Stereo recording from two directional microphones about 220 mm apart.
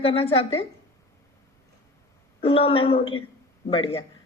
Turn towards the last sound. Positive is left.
turn(degrees=25)  # may be behind; listen again after turning